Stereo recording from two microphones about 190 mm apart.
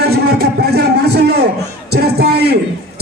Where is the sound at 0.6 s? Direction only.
60° right (ahead or behind).